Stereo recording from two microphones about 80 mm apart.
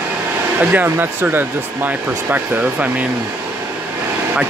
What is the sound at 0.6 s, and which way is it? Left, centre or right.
Speech, right.